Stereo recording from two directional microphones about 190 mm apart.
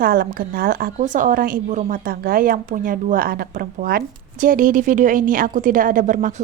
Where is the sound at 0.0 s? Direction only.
50° right (ahead or behind).